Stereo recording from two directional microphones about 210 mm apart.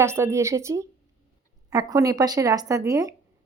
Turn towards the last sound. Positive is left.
turn(degrees=-15)  # may be behind; listen again after turning